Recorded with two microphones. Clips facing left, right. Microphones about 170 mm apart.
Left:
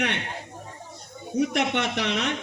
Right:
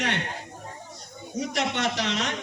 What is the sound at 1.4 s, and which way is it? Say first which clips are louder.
Speech: left 4 dB; 60° left (ahead or behind).